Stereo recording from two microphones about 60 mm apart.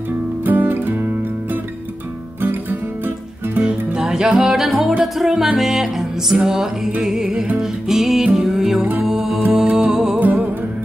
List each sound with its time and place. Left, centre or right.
0.5 s music: right
3.6 s music: centre
10.1 s music: right